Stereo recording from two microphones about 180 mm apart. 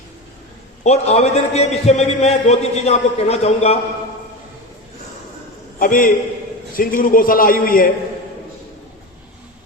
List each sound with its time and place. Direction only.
0.9 s a man's voice: 35° left (ahead or behind)
5.8 s a man's voice: 50° left (ahead or behind)